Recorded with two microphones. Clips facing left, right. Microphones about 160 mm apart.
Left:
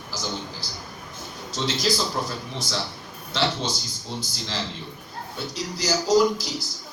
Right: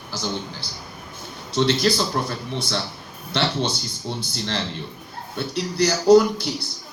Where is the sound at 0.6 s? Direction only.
65° right (ahead or behind).